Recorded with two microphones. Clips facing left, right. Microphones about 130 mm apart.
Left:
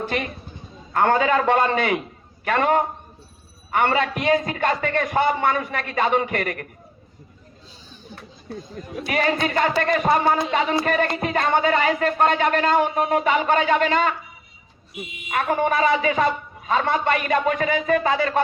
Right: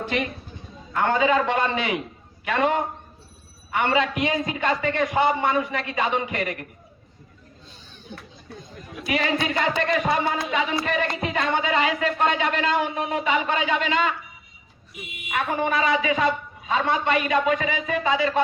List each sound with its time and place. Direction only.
0.1 s music: 45° left (ahead or behind)
2.4 s a man's voice: 50° left (ahead or behind)
3.7 s music: 45° left (ahead or behind)
8.1 s speech: 5° left (ahead or behind)
9.0 s music: 50° left (ahead or behind)
15.3 s music: 45° left (ahead or behind)